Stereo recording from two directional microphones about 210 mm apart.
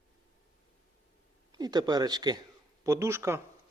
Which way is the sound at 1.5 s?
20° right (ahead or behind).